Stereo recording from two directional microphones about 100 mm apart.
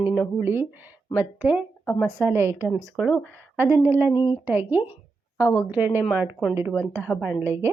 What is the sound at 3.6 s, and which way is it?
Speech, 20° right (ahead or behind).